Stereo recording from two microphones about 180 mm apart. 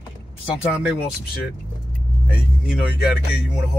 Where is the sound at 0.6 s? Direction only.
5° right (ahead or behind).